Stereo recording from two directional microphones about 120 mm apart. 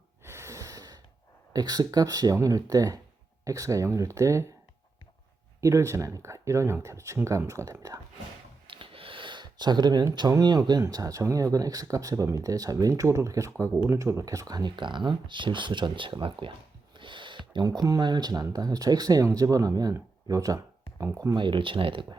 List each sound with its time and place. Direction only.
0.3 s gasp: 25° right (ahead or behind)
1.5 s speech: 35° right (ahead or behind)
5.5 s speech: 25° right (ahead or behind)
8.6 s speech: 45° right (ahead or behind); by 21.3 s 25° right (ahead or behind)
21.3 s speech: 40° right (ahead or behind)